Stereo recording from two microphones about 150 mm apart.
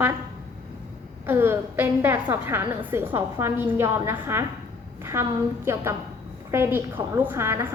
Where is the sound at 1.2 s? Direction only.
15° right (ahead or behind).